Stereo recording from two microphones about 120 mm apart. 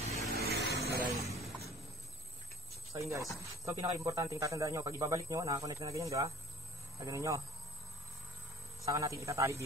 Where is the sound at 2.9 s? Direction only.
25° right (ahead or behind).